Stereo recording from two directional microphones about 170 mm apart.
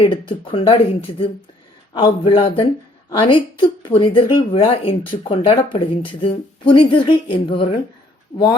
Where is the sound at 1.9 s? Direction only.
30° left (ahead or behind).